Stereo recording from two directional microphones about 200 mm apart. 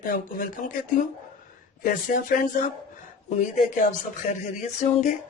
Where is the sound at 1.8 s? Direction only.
45° left (ahead or behind).